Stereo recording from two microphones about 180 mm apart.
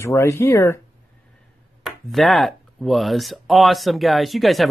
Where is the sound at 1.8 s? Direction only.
Centre (ahead or behind).